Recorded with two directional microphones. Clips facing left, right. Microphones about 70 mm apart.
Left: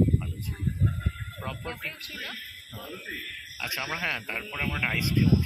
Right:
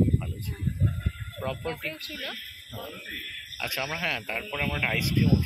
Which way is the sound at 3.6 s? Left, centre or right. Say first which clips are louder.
Right 1 dB; centre.